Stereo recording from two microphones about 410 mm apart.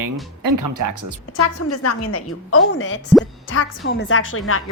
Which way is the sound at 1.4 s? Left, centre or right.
Left.